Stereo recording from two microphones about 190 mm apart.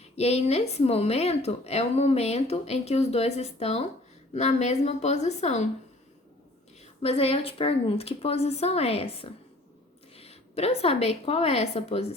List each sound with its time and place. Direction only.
0.2 s speech: 35° left (ahead or behind)
7.0 s a woman's voice: 30° left (ahead or behind)